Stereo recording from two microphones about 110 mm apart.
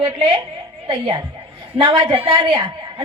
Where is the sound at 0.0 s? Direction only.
25° right (ahead or behind).